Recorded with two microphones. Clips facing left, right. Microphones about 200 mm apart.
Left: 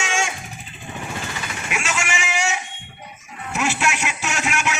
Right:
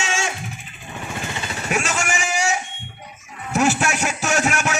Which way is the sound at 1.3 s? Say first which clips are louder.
Right 4 dB; 30° right (ahead or behind).